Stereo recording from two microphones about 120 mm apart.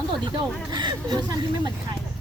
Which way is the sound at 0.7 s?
35° right (ahead or behind).